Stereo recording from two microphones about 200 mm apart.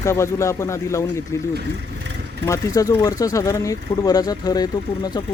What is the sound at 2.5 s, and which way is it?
Speech, 15° left (ahead or behind).